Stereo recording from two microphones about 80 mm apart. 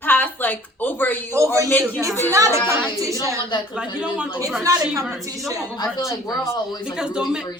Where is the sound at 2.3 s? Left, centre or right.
Right.